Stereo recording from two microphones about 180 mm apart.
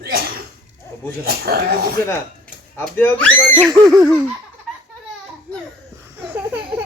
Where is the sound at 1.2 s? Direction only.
60° right (ahead or behind).